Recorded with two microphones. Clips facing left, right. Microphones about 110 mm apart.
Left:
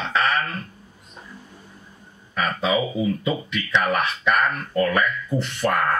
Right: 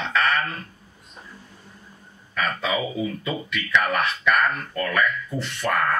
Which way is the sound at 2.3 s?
25° left (ahead or behind).